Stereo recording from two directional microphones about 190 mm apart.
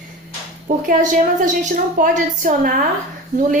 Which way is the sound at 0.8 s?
40° right (ahead or behind).